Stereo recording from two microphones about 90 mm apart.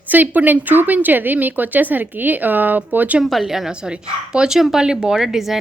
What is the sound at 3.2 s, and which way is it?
A woman's voice, centre (ahead or behind).